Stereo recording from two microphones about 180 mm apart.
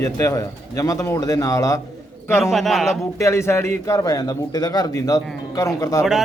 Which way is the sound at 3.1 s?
15° left (ahead or behind).